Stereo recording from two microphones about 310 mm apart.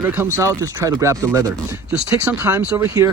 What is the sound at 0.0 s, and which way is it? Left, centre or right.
Speech, centre.